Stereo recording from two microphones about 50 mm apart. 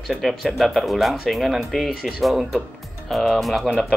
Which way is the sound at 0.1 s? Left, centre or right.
Centre.